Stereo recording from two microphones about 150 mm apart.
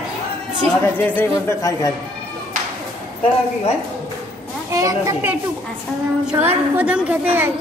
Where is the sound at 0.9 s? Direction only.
15° left (ahead or behind).